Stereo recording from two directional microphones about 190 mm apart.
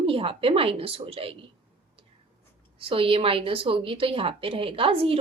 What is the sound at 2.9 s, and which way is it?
A woman's voice, 30° right (ahead or behind).